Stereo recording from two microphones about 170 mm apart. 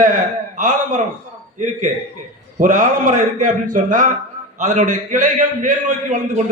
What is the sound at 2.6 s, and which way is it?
A man's voice, 50° right (ahead or behind).